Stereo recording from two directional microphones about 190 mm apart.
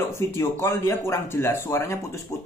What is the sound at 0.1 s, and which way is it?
Speech, 15° left (ahead or behind).